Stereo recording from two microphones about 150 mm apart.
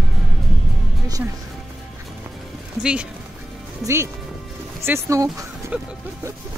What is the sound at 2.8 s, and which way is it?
Speech, 5° right (ahead or behind).